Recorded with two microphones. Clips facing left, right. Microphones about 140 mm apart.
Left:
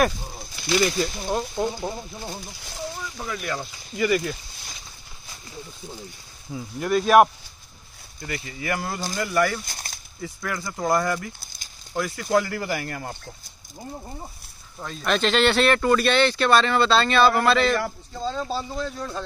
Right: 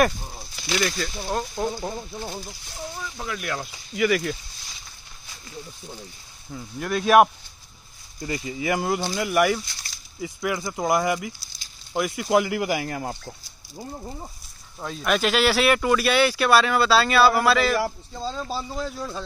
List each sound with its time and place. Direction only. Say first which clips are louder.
0.7 s speech: left 4 dB; 10° left (ahead or behind)
3.2 s speech: even; centre (ahead or behind)
6.5 s speech: left 4 dB; centre (ahead or behind)
8.2 s speech: right 4 dB; 20° right (ahead or behind)
9.7 s a sound: left 5 dB; 50° left (ahead or behind)
10.2 s speech: right 4 dB; 15° right (ahead or behind)
14.8 s speech: even; 5° right (ahead or behind)